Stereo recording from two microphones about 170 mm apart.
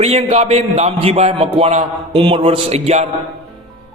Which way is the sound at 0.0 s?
35° right (ahead or behind).